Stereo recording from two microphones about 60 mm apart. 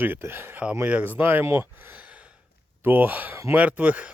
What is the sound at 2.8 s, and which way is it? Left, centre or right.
Speech, right.